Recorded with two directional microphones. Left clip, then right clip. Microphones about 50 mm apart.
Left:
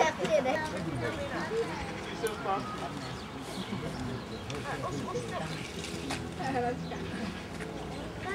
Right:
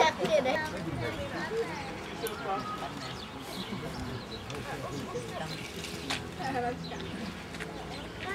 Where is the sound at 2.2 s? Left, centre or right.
Left.